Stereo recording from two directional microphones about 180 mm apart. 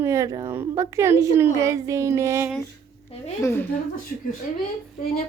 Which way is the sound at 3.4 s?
10° left (ahead or behind).